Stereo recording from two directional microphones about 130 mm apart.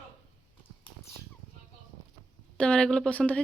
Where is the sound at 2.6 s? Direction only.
5° left (ahead or behind).